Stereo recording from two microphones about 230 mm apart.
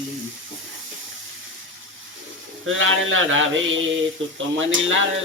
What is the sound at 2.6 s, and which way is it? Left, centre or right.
Speech, right.